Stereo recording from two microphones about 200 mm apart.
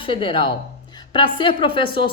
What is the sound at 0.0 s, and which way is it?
A woman's voice, 25° left (ahead or behind).